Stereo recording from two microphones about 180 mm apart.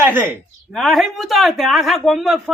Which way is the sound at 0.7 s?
Centre (ahead or behind).